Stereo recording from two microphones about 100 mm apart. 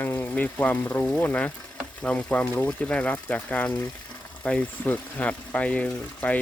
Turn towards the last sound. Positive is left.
turn(degrees=15)  # may be behind; listen again after turning